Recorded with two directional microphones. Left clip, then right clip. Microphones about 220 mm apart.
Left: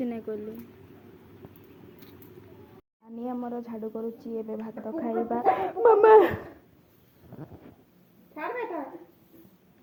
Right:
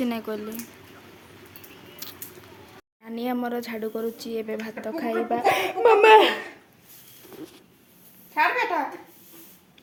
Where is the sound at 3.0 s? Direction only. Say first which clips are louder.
Right 6 dB; 30° right (ahead or behind).